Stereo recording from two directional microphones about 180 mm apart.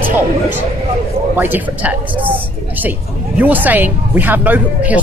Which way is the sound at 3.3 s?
10° right (ahead or behind).